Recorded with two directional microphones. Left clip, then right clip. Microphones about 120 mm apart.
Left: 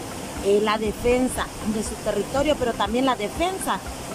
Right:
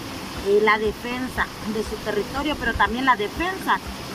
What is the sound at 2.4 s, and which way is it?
Speech, 30° left (ahead or behind).